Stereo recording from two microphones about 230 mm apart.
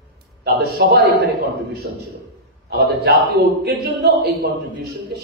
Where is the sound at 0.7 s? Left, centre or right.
Right.